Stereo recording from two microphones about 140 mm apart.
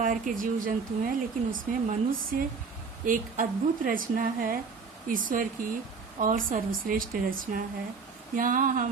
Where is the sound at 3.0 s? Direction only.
75° right (ahead or behind).